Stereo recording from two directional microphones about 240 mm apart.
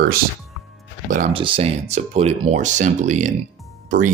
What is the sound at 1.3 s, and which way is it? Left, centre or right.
Speech, right.